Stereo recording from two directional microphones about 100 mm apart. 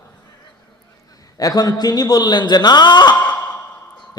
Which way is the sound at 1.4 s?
40° left (ahead or behind).